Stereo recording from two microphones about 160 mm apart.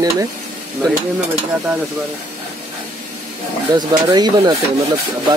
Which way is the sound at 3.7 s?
25° right (ahead or behind).